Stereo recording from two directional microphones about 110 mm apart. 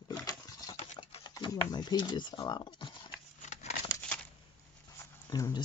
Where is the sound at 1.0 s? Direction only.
65° left (ahead or behind).